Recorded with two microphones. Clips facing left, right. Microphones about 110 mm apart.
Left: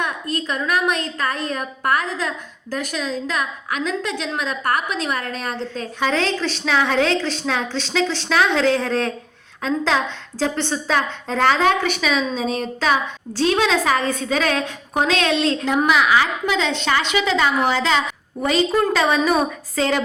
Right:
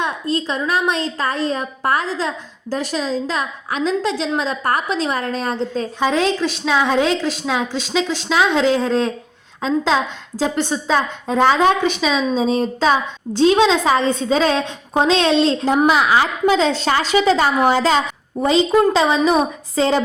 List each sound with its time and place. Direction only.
0.0 s a woman's voice: 30° right (ahead or behind)
6.0 s a woman's voice: 15° right (ahead or behind); by 18.0 s 40° right (ahead or behind)
18.3 s a woman's voice: 25° right (ahead or behind)